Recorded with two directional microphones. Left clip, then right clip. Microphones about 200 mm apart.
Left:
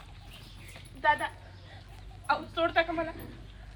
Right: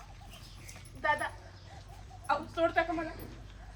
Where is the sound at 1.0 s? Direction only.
5° right (ahead or behind).